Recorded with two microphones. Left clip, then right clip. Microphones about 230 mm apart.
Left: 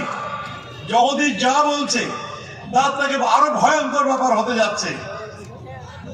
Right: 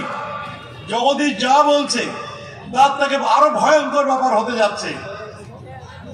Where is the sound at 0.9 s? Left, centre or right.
Right.